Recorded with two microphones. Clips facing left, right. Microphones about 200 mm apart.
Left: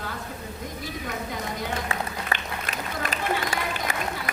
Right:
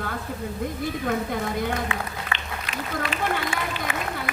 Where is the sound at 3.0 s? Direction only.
40° left (ahead or behind).